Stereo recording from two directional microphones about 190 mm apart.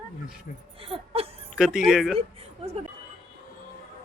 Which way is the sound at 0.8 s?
30° right (ahead or behind).